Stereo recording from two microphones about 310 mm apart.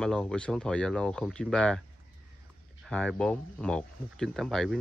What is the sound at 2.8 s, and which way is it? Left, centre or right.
Speech, centre.